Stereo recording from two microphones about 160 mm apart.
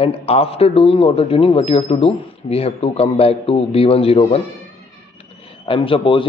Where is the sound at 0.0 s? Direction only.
35° left (ahead or behind).